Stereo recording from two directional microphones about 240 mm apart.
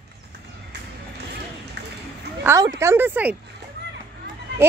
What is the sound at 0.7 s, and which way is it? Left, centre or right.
Music, right.